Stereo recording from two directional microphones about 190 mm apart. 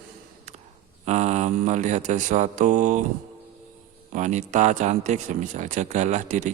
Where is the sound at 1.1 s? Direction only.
35° right (ahead or behind).